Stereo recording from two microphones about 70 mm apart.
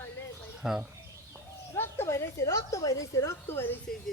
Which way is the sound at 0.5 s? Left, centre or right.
Centre.